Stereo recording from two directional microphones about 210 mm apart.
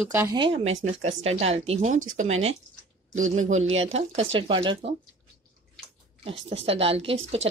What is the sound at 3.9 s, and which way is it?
Speech, 30° right (ahead or behind).